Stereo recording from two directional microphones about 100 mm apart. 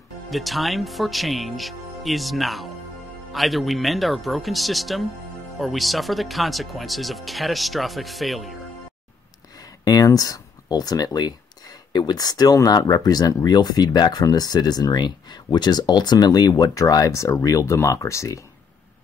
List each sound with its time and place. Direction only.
0.3 s speech: centre (ahead or behind)
9.6 s speech: 40° left (ahead or behind)